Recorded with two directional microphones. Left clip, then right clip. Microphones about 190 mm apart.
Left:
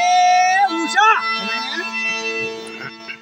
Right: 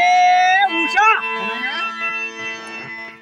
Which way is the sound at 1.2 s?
35° left (ahead or behind).